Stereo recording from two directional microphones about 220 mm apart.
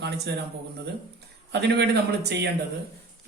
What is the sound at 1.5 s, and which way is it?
Speech, 50° right (ahead or behind).